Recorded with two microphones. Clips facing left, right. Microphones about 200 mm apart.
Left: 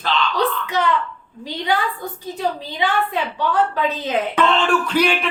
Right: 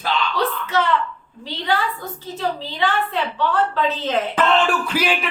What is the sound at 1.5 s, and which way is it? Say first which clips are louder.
A woman's voice: left 1 dB; 15° left (ahead or behind).